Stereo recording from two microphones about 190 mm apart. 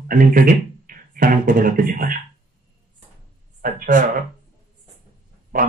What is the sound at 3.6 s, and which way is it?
Speech, 45° right (ahead or behind).